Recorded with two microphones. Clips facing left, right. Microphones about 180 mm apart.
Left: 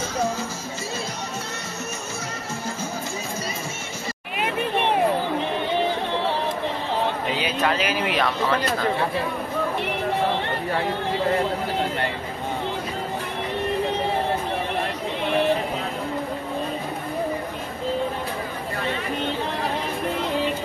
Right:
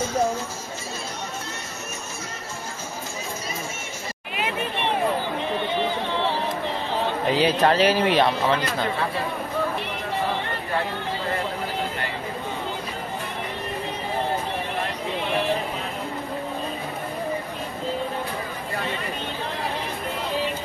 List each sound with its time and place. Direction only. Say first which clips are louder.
7.3 s speech: right 8 dB; 35° right (ahead or behind)